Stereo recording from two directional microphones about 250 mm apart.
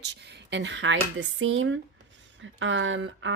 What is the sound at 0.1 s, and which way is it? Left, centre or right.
Speech, right.